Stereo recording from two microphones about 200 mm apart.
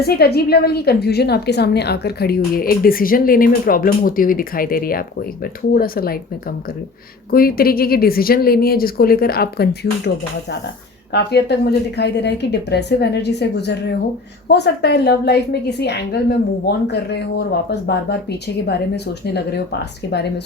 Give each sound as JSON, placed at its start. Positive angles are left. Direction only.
{"t": 0.0, "sound": "a woman's voice", "side_deg": 50}
{"t": 7.3, "sound": "a woman's voice", "side_deg": 45}
{"t": 11.1, "sound": "a woman's voice", "side_deg": 55}